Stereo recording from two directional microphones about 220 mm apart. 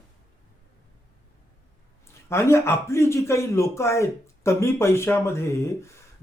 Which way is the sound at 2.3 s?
10° left (ahead or behind).